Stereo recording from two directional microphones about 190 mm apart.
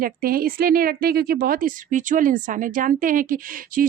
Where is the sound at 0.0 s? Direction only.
50° right (ahead or behind).